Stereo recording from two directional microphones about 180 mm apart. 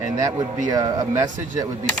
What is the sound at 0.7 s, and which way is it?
Speech, 20° right (ahead or behind).